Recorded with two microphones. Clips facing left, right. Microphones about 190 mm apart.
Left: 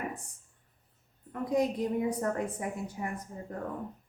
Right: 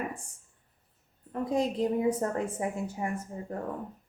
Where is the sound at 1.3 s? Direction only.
30° right (ahead or behind).